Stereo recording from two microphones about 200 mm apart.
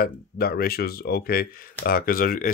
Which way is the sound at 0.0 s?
50° left (ahead or behind).